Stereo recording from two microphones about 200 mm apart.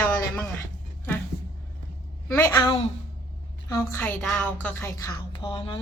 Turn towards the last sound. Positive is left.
turn(degrees=25)  # may be behind; listen again after turning